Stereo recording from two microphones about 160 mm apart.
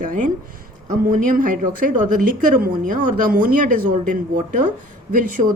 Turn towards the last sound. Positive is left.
turn(degrees=-60)  # may be behind; listen again after turning